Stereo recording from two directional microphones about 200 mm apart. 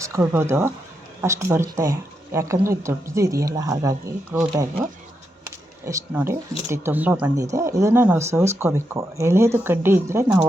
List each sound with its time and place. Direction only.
0.0 s speech: 15° right (ahead or behind)